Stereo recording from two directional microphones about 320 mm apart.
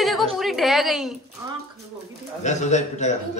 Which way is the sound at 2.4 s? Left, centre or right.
Left.